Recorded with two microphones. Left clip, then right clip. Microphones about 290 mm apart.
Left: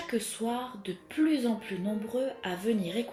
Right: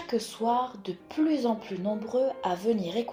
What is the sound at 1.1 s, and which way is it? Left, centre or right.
Speech, right.